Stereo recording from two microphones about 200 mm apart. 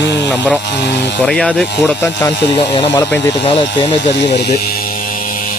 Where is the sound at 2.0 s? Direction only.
20° left (ahead or behind).